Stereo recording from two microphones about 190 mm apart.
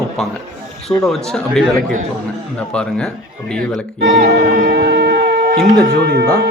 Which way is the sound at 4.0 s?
65° right (ahead or behind).